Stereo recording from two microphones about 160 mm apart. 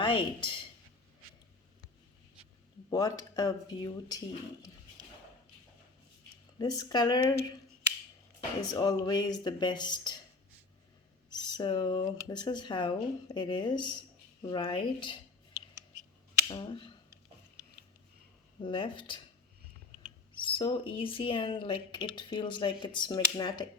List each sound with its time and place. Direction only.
0.0 s speech: 30° left (ahead or behind)
2.9 s speech: 25° left (ahead or behind)
6.6 s speech: 25° left (ahead or behind)
8.7 s speech: 25° left (ahead or behind)
11.3 s speech: 25° left (ahead or behind)
16.5 s speech: 25° left (ahead or behind)
18.6 s speech: 30° left (ahead or behind)
20.3 s speech: 30° left (ahead or behind)